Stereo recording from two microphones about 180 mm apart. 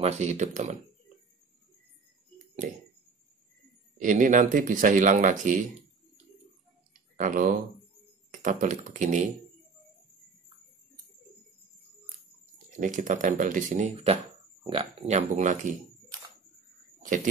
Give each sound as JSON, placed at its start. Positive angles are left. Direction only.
{"t": 0.0, "sound": "speech", "side_deg": -40}
{"t": 2.3, "sound": "a sound", "side_deg": -45}
{"t": 4.0, "sound": "speech", "side_deg": -45}
{"t": 7.2, "sound": "speech", "side_deg": -45}
{"t": 12.7, "sound": "speech", "side_deg": -45}
{"t": 17.0, "sound": "speech", "side_deg": -45}